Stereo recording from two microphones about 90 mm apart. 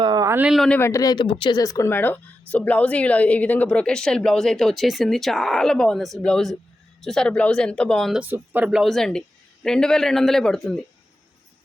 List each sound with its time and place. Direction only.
0.0 s a sound: 50° right (ahead or behind)
0.8 s speech: 35° left (ahead or behind)
1.1 s speech: 70° left (ahead or behind)
1.5 s speech: 40° left (ahead or behind)
1.9 s speech: 20° left (ahead or behind)
8.3 s speech: 20° right (ahead or behind)
8.7 s a man's voice: centre (ahead or behind)